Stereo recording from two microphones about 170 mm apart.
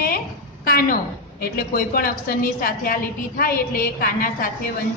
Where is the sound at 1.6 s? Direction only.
60° left (ahead or behind).